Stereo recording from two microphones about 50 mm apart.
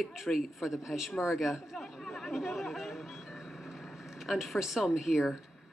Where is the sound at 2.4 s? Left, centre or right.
Centre.